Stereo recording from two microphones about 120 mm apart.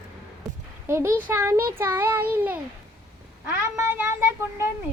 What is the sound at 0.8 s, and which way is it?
A child's voice, 20° right (ahead or behind).